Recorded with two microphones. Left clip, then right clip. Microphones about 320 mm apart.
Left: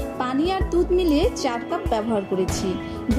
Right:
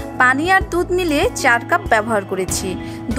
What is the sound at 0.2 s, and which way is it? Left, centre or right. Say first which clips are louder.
A woman's voice: right 11 dB; right.